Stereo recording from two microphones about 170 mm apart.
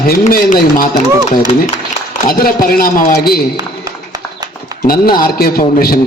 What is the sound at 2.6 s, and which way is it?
Speech, 60° left (ahead or behind).